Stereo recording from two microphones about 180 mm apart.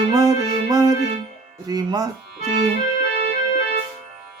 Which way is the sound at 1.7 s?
20° right (ahead or behind).